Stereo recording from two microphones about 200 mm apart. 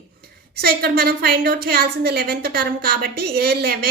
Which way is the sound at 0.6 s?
50° right (ahead or behind).